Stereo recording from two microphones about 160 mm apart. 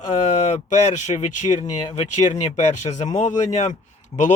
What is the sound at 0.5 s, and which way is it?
Speech, 45° left (ahead or behind).